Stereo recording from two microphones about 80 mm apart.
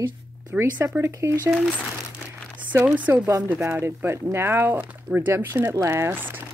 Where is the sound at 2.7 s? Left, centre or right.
Right.